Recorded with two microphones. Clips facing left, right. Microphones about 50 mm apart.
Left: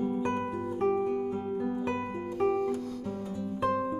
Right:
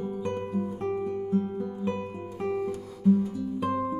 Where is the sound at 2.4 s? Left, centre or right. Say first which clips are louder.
Left 1 dB; centre.